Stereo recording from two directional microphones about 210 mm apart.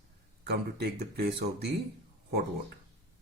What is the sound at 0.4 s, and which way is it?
Speech, 50° right (ahead or behind).